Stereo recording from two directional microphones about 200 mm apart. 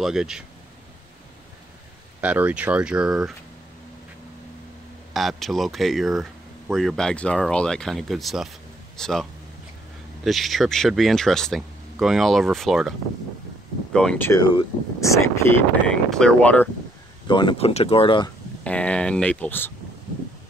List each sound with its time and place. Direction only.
0.0 s speech: 5° right (ahead or behind)
2.2 s speech: 5° right (ahead or behind)
5.1 s speech: centre (ahead or behind)
13.9 s speech: 5° left (ahead or behind)
14.5 s speech: 20° left (ahead or behind)
17.3 s speech: 25° left (ahead or behind)
18.6 s speech: 5° left (ahead or behind)